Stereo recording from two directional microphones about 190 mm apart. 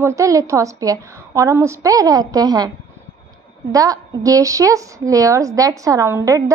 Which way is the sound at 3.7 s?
20° right (ahead or behind).